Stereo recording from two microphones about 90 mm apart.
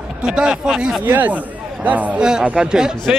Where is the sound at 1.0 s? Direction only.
20° right (ahead or behind).